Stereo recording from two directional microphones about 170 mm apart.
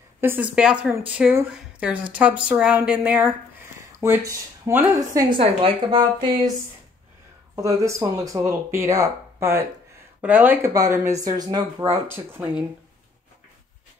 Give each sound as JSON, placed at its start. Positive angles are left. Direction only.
{"t": 0.2, "sound": "speech", "side_deg": -10}
{"t": 5.3, "sound": "speech", "side_deg": -30}
{"t": 7.5, "sound": "speech", "side_deg": -20}